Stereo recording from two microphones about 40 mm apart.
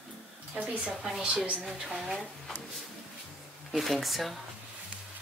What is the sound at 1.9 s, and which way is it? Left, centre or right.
Speech, centre.